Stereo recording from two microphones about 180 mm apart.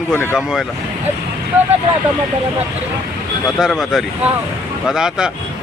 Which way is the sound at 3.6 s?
Centre (ahead or behind).